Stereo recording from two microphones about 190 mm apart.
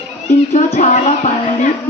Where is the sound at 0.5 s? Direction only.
40° left (ahead or behind).